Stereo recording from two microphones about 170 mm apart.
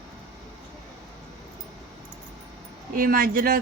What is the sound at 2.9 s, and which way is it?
Speech, 55° right (ahead or behind).